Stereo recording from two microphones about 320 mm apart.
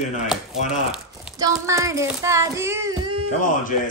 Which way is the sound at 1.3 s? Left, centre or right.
Centre.